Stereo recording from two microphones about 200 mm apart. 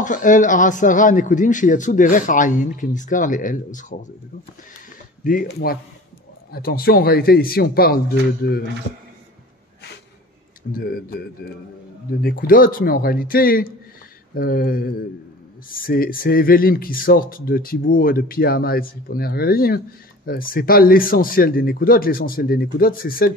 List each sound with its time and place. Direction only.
0.0 s a man's voice: 40° left (ahead or behind)
5.2 s speech: 45° left (ahead or behind)
10.7 s speech: 50° left (ahead or behind)
15.9 s speech: 45° left (ahead or behind)